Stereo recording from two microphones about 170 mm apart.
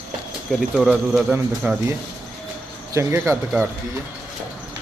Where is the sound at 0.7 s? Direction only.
5° right (ahead or behind).